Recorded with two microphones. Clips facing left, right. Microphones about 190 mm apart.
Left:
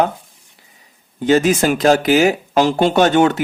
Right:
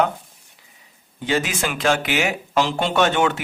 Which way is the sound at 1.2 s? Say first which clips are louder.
Left 9 dB; 40° left (ahead or behind).